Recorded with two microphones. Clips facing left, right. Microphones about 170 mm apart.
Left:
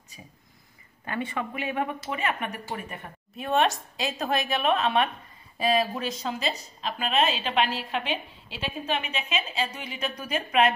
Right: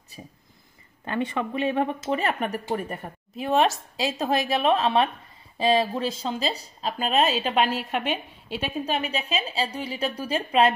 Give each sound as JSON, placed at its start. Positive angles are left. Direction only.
{"t": 1.0, "sound": "speech", "side_deg": -25}